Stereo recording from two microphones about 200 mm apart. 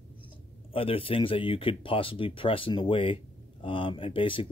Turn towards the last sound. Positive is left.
turn(degrees=25)  # may be behind; listen again after turning